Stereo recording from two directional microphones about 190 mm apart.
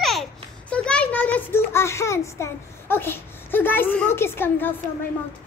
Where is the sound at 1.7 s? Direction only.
15° left (ahead or behind).